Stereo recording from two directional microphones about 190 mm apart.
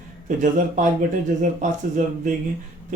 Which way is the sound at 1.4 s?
45° right (ahead or behind).